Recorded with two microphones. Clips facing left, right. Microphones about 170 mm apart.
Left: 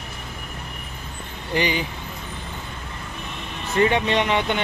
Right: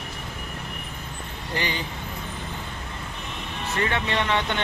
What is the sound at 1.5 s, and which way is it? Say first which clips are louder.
Speech: left 6 dB; 15° left (ahead or behind).